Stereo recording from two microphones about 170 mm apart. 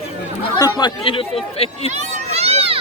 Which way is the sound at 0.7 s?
30° left (ahead or behind).